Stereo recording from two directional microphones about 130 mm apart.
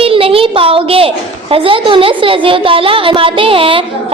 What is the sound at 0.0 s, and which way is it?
A woman's voice, 45° right (ahead or behind).